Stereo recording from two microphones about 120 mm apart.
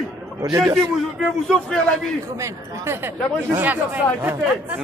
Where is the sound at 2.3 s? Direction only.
25° right (ahead or behind).